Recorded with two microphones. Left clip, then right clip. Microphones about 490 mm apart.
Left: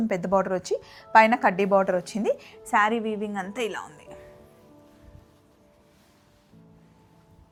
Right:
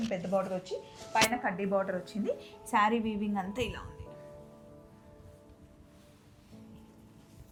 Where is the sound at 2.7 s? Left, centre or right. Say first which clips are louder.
Left 6 dB; centre.